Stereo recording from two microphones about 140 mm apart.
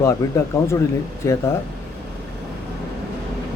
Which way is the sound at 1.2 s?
20° left (ahead or behind).